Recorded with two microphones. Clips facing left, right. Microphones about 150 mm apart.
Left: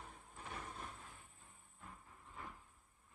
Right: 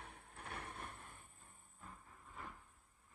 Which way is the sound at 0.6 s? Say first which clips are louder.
Even; 60° right (ahead or behind).